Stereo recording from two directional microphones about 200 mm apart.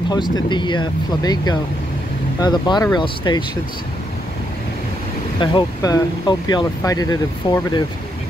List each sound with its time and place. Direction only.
0.1 s speech: 25° left (ahead or behind)
5.4 s speech: 20° left (ahead or behind)